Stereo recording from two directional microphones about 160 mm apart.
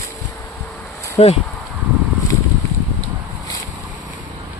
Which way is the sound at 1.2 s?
40° left (ahead or behind).